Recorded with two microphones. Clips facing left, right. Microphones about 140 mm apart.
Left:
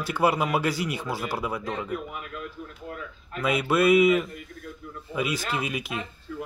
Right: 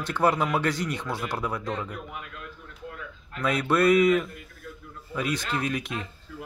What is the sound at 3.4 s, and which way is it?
Speech, 5° left (ahead or behind).